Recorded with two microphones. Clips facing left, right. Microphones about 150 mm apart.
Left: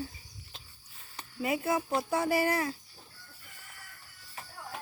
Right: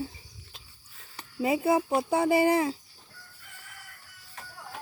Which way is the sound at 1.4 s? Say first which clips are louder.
Right 6 dB; 25° right (ahead or behind).